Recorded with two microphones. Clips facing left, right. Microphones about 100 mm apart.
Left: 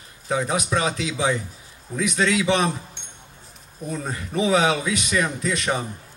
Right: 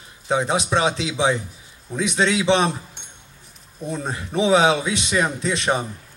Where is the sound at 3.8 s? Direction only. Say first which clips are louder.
Right 2 dB; 25° right (ahead or behind).